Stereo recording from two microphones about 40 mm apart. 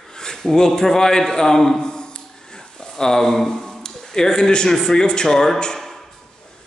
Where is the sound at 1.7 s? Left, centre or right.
Left.